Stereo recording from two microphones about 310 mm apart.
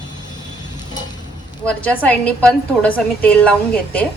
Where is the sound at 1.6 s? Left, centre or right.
Centre.